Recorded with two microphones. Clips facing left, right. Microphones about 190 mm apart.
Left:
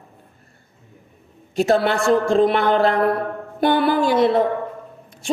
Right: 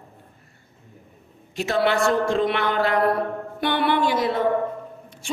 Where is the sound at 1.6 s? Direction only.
40° left (ahead or behind).